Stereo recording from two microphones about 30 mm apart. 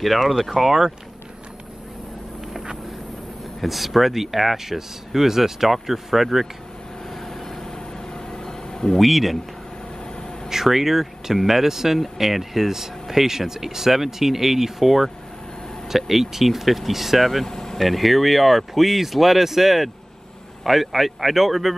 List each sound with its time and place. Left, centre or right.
0.0 s speech: centre
3.6 s speech: centre
7.2 s a sound: centre
8.9 s speech: centre
10.5 s speech: centre
17.5 s vehicle: centre
17.7 s speech: centre